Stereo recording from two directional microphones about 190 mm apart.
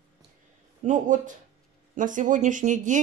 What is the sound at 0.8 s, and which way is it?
A woman's voice, 40° right (ahead or behind).